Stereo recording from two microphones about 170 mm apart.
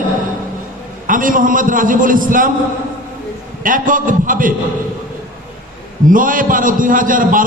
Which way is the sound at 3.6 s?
55° right (ahead or behind).